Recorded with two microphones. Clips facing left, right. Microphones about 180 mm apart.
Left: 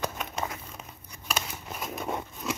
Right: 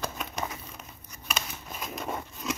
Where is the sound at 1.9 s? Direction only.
Centre (ahead or behind).